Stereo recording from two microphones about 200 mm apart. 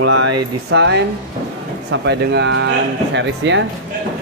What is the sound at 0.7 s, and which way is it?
Speech, 60° right (ahead or behind).